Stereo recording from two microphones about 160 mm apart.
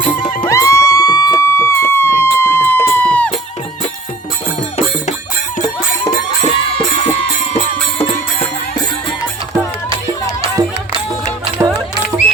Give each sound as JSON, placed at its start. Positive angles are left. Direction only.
{"t": 0.4, "sound": "music", "side_deg": 20}
{"t": 6.4, "sound": "music", "side_deg": 35}
{"t": 11.6, "sound": "music", "side_deg": -20}